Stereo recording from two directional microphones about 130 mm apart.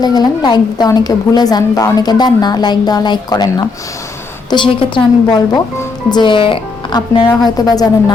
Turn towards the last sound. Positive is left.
turn(degrees=30)  # may be behind; listen again after turning